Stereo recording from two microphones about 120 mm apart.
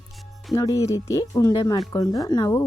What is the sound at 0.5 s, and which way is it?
Speech, 30° left (ahead or behind).